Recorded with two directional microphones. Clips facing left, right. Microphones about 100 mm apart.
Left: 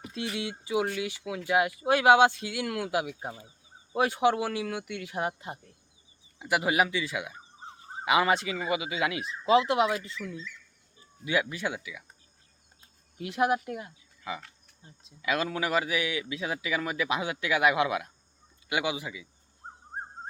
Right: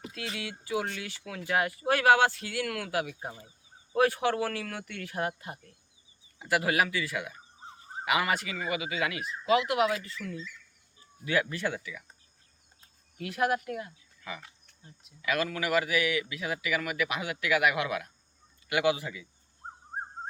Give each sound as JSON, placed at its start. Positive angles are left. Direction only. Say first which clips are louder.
{"t": 0.0, "sound": "a sound", "louder": "left 4 dB", "side_deg": 25}
{"t": 0.3, "sound": "speech", "louder": "left 3 dB", "side_deg": 20}
{"t": 13.1, "sound": "speech", "louder": "left 2 dB", "side_deg": 20}